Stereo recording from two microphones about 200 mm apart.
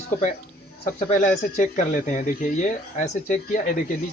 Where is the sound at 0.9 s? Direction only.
35° left (ahead or behind).